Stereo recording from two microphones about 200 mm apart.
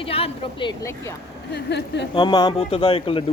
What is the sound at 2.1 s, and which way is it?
Speech, 20° left (ahead or behind).